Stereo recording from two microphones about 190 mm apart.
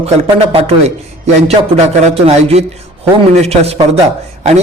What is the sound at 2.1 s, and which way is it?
A man's voice, 30° right (ahead or behind).